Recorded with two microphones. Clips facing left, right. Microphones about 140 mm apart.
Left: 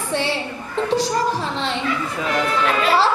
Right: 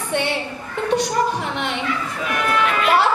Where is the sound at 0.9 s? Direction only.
65° right (ahead or behind).